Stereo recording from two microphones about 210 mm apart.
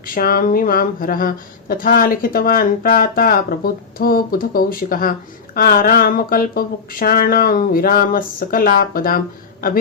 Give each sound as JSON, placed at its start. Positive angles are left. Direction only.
{"t": 0.1, "sound": "speech", "side_deg": 45}